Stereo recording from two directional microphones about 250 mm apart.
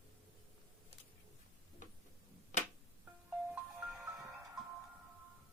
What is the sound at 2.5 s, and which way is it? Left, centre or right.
Music, left.